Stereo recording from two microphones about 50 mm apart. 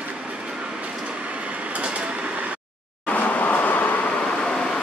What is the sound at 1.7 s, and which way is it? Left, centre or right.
Vehicle, right.